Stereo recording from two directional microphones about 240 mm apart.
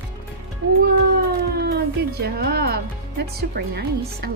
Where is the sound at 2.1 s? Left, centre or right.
Right.